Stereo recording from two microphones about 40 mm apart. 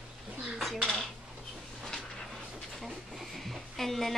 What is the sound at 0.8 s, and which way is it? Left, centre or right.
Dishes, centre.